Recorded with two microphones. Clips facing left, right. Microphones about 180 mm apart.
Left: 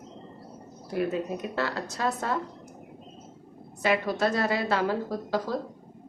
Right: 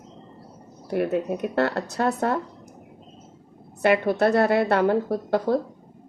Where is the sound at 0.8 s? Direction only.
60° right (ahead or behind).